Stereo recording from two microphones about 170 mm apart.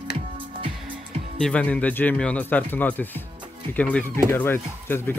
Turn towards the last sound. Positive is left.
turn(degrees=10)  # may be behind; listen again after turning